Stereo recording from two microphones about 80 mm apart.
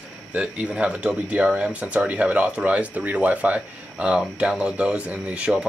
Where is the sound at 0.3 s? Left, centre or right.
Centre.